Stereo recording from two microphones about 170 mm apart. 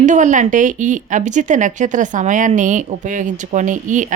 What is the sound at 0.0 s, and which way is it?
Speech, 45° right (ahead or behind).